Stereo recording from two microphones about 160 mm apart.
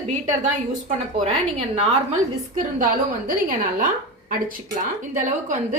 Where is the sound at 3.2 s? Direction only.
60° right (ahead or behind).